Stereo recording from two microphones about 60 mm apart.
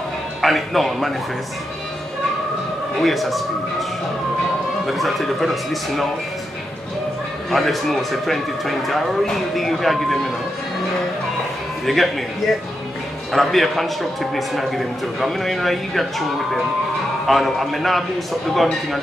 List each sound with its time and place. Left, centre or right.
0.4 s a man's voice: centre
3.0 s a man's voice: centre
4.8 s a man's voice: centre
7.5 s a man's voice: centre
11.8 s a man's voice: centre
13.3 s a man's voice: centre